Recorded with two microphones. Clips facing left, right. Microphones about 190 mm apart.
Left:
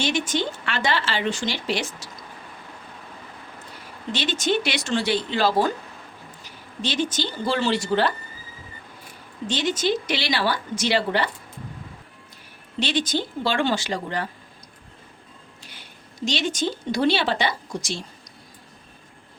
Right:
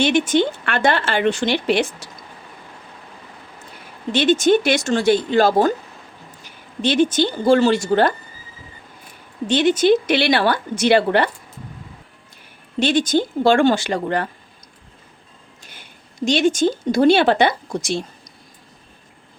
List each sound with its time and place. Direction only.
0.0 s a woman's voice: 60° right (ahead or behind)
4.1 s speech: 55° right (ahead or behind)
6.8 s speech: 55° right (ahead or behind)
9.5 s a woman's voice: 60° right (ahead or behind)
12.8 s speech: 50° right (ahead or behind)
15.6 s speech: 50° right (ahead or behind)